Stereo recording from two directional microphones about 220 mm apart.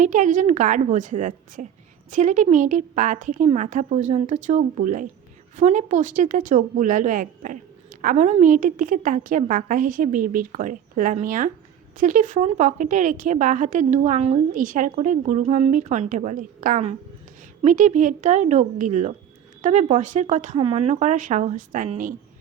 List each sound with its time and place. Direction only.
0.0 s a woman's voice: 35° right (ahead or behind)